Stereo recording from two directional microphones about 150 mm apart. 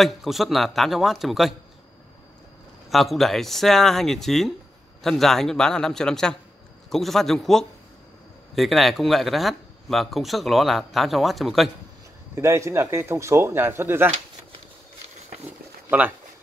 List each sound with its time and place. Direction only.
0.0 s speech: centre (ahead or behind)
2.9 s speech: centre (ahead or behind)
12.4 s speech: 20° right (ahead or behind)